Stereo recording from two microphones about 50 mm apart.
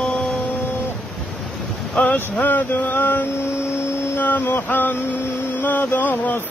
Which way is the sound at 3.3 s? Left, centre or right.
Left.